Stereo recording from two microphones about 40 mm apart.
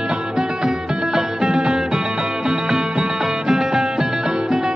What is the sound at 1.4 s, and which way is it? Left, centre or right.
Music, centre.